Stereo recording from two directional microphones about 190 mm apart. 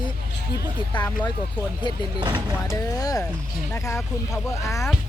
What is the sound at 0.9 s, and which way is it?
Speech, 25° left (ahead or behind).